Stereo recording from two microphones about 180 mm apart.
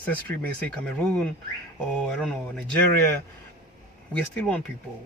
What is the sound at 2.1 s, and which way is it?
Speech, 5° left (ahead or behind).